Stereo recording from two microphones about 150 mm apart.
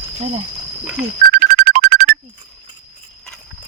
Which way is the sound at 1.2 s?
90° right.